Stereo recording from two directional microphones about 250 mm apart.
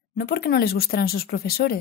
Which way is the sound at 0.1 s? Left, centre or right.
Left.